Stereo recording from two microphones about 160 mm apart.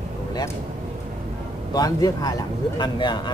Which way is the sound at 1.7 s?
25° left (ahead or behind).